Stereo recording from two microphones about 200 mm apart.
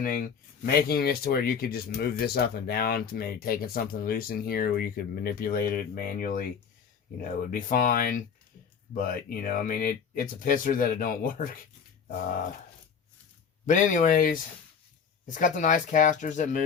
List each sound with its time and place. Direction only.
0.0 s speech: 45° left (ahead or behind)
13.7 s speech: 40° left (ahead or behind)